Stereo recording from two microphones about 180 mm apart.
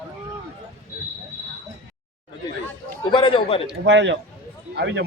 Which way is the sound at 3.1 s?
30° left (ahead or behind).